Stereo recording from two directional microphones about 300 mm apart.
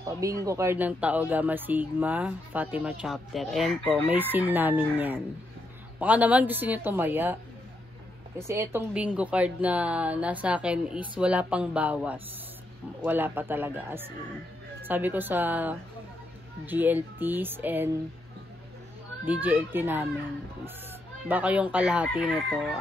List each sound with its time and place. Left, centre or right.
0.2 s speech: centre
8.4 s speech: centre
19.2 s speech: centre
21.3 s speech: centre